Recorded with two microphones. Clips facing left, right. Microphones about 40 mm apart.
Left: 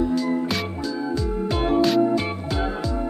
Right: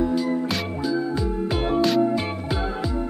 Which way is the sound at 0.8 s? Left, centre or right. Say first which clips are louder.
Right 4 dB; centre.